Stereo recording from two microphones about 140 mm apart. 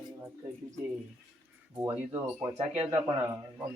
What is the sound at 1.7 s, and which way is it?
Speech, 20° right (ahead or behind).